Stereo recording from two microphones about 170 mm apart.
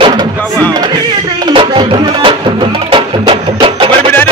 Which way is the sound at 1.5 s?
30° right (ahead or behind).